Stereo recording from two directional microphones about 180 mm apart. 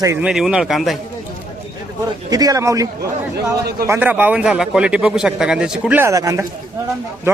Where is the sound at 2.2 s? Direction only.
20° right (ahead or behind).